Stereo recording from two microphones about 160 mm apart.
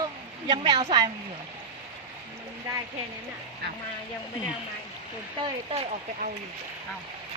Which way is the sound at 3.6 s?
85° right.